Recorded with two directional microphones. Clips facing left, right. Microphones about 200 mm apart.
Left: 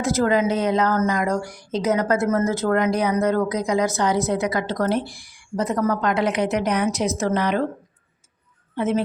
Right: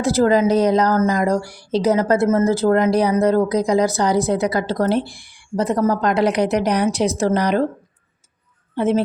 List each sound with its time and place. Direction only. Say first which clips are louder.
0.0 s a woman's voice: right 4 dB; 35° right (ahead or behind)
8.7 s speech: right 4 dB; 30° right (ahead or behind)